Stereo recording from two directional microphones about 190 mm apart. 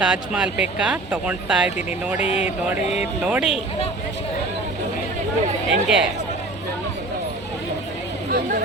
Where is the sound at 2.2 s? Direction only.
30° left (ahead or behind).